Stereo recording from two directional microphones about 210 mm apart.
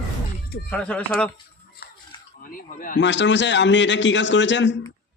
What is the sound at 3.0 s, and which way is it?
A man's voice, 60° left (ahead or behind).